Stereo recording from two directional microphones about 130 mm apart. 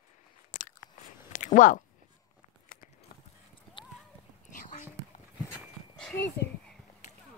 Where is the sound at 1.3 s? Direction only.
80° left.